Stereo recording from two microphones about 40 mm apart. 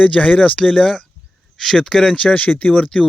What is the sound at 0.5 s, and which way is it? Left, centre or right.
Speech, centre.